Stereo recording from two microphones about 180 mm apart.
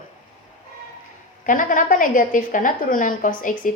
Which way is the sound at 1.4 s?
50° left (ahead or behind).